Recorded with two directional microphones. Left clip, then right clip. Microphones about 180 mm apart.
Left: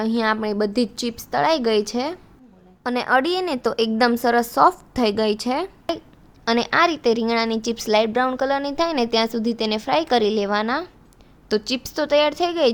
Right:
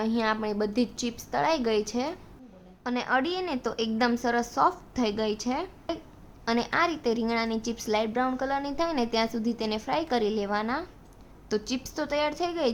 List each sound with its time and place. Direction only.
0.0 s a woman's voice: 40° left (ahead or behind)
2.8 s a woman's voice: 50° left (ahead or behind)